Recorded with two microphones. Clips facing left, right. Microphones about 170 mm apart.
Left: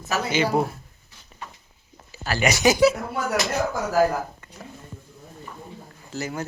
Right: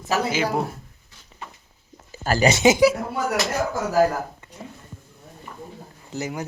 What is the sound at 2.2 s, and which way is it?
Speech, 40° right (ahead or behind).